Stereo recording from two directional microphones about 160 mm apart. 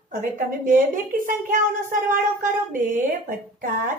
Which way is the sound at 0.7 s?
60° right (ahead or behind).